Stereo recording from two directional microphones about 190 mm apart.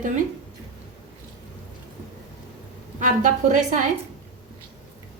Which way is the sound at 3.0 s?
40° right (ahead or behind).